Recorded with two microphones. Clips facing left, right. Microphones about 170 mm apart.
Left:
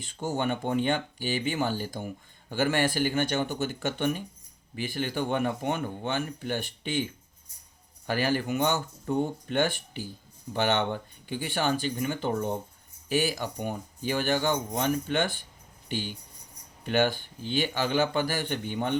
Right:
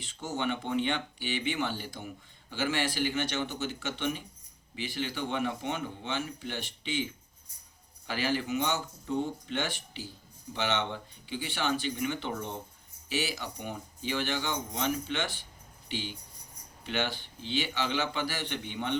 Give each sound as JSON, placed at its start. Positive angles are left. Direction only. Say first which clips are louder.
{"t": 0.0, "sound": "speech", "louder": "left 4 dB", "side_deg": 50}
{"t": 8.0, "sound": "speech", "louder": "left 4 dB", "side_deg": 50}